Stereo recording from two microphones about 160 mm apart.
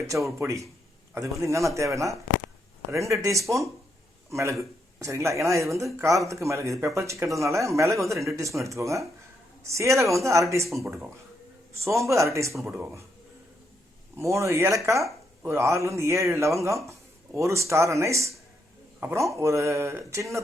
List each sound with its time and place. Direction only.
0.3 s speech: 20° right (ahead or behind)
11.9 s speech: 20° right (ahead or behind)
14.2 s speech: 15° right (ahead or behind)